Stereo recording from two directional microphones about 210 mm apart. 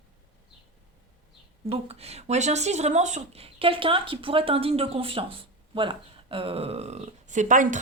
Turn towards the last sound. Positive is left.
turn(degrees=-35)  # may be behind; listen again after turning